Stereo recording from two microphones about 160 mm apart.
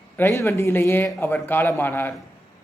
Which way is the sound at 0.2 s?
15° left (ahead or behind).